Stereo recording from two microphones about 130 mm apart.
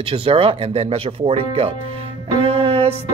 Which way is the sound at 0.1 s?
45° right (ahead or behind).